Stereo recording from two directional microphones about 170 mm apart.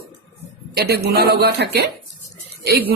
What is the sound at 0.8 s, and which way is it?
Speech, 70° right (ahead or behind).